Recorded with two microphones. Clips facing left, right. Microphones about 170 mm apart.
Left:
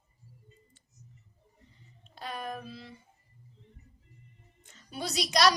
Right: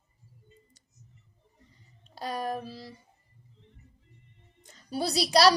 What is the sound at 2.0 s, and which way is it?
Child singing, 40° right (ahead or behind).